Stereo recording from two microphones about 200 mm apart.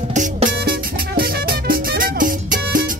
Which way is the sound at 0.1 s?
40° right (ahead or behind).